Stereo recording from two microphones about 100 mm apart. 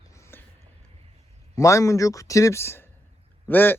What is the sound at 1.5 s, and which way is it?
A man's voice, 30° left (ahead or behind).